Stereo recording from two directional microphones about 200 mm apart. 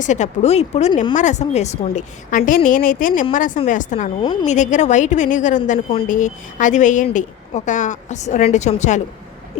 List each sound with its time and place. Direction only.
0.0 s a woman's voice: 35° left (ahead or behind)